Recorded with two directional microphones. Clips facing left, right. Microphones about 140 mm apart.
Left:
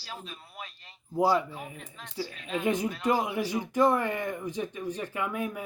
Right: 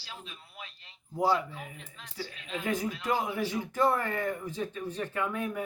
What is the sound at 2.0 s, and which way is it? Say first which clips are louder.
Speech: left 5 dB; 45° left (ahead or behind).